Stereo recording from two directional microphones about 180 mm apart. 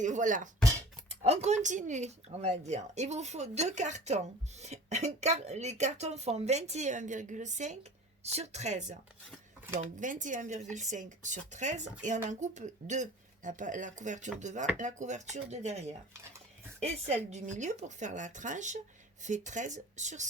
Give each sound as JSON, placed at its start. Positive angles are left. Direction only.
{"t": 0.0, "sound": "speech", "side_deg": -45}
{"t": 10.0, "sound": "speech", "side_deg": -45}